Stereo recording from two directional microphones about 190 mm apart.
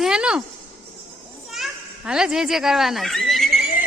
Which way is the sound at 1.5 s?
Centre (ahead or behind).